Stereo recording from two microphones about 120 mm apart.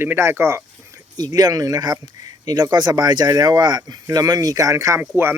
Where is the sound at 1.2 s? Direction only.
35° right (ahead or behind).